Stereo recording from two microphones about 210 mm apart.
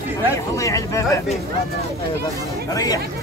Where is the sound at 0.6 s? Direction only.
15° left (ahead or behind).